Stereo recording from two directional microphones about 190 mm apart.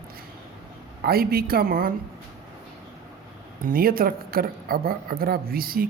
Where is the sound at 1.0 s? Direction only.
55° right (ahead or behind).